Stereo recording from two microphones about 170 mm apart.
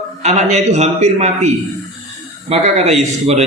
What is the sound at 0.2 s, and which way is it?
A man's voice, 40° right (ahead or behind).